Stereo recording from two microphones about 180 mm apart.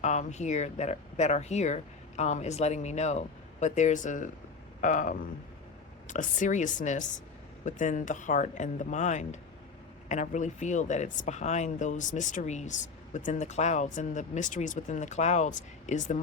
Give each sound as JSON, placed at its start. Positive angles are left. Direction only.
{"t": 0.0, "sound": "speech", "side_deg": 40}